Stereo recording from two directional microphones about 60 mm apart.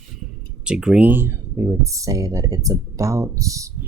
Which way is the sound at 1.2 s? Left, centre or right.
Right.